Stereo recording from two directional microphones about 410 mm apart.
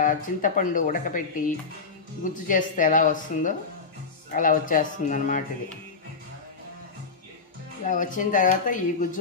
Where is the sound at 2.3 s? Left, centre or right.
Centre.